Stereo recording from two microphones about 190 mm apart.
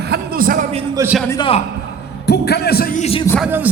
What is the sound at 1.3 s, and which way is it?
Speech, 25° left (ahead or behind).